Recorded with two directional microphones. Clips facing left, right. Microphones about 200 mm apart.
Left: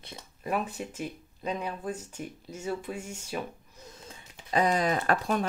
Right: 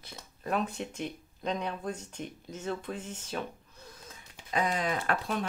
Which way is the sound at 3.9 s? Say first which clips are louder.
Left 3 dB; 30° left (ahead or behind).